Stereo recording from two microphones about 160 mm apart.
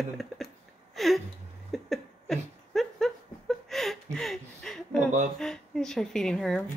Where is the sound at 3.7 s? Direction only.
Centre (ahead or behind).